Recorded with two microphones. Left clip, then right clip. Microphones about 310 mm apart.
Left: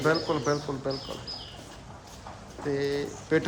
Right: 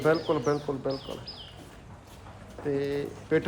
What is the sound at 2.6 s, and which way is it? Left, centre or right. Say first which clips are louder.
Speech: left 1 dB; centre.